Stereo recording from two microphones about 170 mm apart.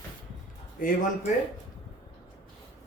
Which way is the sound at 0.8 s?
50° left (ahead or behind).